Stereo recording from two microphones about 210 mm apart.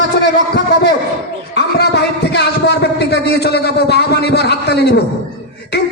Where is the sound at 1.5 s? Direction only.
55° left (ahead or behind).